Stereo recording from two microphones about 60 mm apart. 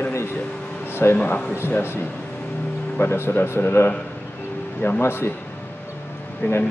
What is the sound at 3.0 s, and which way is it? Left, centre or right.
A man's voice, left.